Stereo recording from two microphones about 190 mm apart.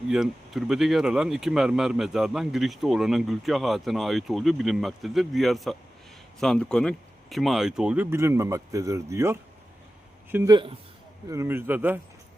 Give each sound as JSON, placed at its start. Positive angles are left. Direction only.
{"t": 0.1, "sound": "speech", "side_deg": 0}
{"t": 11.3, "sound": "speech", "side_deg": -15}